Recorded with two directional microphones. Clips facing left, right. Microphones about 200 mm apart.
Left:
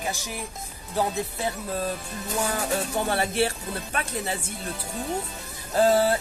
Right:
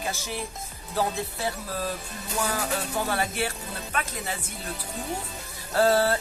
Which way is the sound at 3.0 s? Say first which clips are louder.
Left 4 dB; 30° left (ahead or behind).